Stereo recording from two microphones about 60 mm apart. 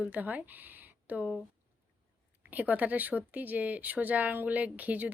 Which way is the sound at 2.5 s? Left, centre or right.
Right.